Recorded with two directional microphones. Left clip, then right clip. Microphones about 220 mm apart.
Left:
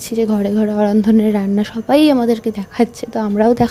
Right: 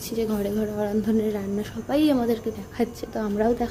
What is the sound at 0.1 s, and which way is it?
A woman's voice, 30° left (ahead or behind).